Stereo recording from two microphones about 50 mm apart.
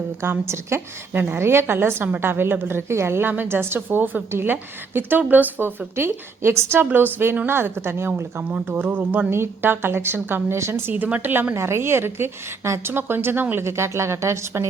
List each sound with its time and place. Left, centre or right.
0.2 s a woman's voice: right
1.1 s a woman's voice: right
3.2 s a woman's voice: right
6.9 s a woman's voice: right
8.4 s speech: right
9.3 s a woman's voice: right
10.9 s speech: right
11.5 s a woman's voice: right
12.6 s speech: right
12.9 s a woman's voice: right
13.7 s speech: right